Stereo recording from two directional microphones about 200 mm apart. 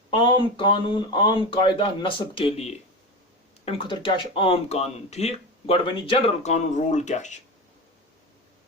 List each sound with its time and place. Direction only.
0.1 s speech: 25° left (ahead or behind)